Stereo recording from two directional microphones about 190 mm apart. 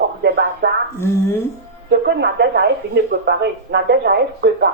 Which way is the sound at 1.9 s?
60° right (ahead or behind).